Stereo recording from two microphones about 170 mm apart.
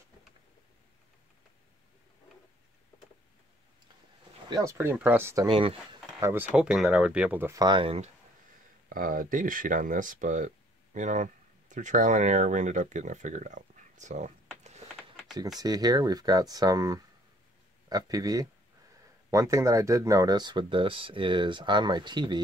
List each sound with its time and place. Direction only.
4.5 s speech: 20° right (ahead or behind)
5.5 s speech: 30° right (ahead or behind)
6.1 s speech: 15° right (ahead or behind)
6.5 s speech: 5° right (ahead or behind)
7.6 s speech: 30° right (ahead or behind)
8.8 s speech: 55° right (ahead or behind)
14.6 s a sound: 40° right (ahead or behind)
15.6 s speech: 25° right (ahead or behind)